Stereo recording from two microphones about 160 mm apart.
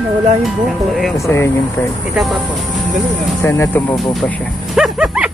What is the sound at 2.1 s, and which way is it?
Speech, centre (ahead or behind).